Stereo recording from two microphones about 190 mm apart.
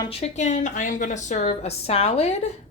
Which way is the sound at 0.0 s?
30° left (ahead or behind).